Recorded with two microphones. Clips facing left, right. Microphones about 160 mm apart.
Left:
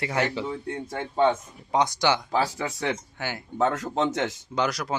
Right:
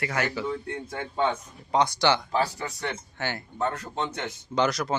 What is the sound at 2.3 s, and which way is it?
Speech, 90° left.